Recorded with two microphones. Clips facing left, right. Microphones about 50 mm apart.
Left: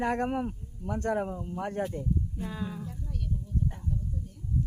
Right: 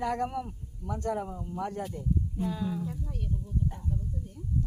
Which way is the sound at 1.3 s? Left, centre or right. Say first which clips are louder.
Left 1 dB; left.